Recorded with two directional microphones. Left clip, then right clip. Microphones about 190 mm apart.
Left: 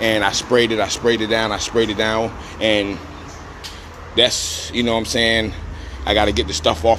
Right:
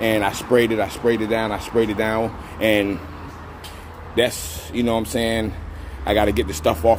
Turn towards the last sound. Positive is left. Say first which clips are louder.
# left 1 dB
turn(degrees=-15)  # may be behind; listen again after turning